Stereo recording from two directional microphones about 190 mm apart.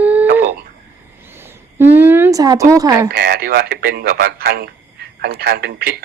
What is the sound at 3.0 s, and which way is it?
Speech, 55° right (ahead or behind).